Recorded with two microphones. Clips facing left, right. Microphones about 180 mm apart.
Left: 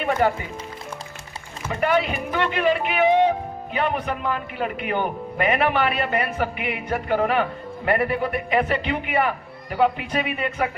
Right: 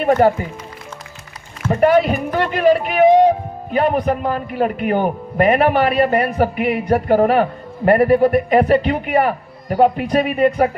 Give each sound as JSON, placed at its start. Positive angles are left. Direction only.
{"t": 0.0, "sound": "speech", "side_deg": -40}
{"t": 1.7, "sound": "speech", "side_deg": -40}